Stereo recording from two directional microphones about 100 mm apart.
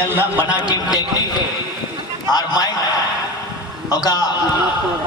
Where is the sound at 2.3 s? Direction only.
40° left (ahead or behind).